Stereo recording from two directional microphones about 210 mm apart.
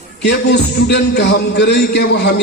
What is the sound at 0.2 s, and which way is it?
Speech, 55° left (ahead or behind).